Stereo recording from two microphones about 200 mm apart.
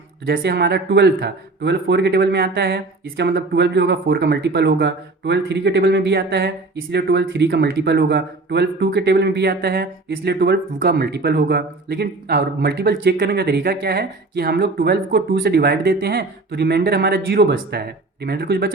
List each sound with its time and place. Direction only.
0.3 s speech: 55° right (ahead or behind)